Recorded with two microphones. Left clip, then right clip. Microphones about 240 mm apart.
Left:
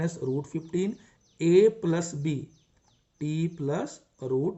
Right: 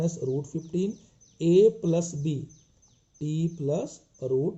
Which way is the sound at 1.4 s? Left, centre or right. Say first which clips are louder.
Even; left.